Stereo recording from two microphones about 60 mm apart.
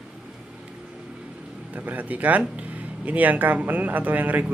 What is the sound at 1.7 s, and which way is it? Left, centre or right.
Speech, right.